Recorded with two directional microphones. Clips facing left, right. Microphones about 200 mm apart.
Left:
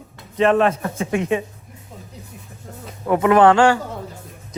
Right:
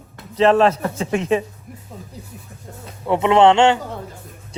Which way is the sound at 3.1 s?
25° right (ahead or behind).